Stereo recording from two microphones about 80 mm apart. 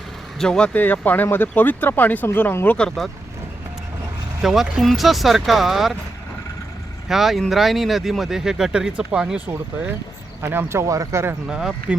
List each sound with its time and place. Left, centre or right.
0.3 s speech: centre
0.7 s speech: left
2.7 s speech: centre
4.4 s speech: centre
7.1 s speech: centre
10.4 s speech: right
11.4 s speech: centre